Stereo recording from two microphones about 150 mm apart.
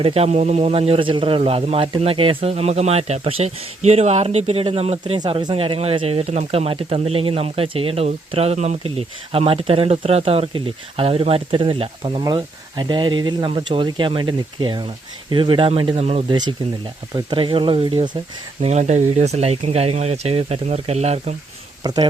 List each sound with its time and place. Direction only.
0.0 s speech: 40° right (ahead or behind)
5.2 s speech: 30° right (ahead or behind)
18.6 s speech: 50° right (ahead or behind)
21.8 s speech: 30° right (ahead or behind)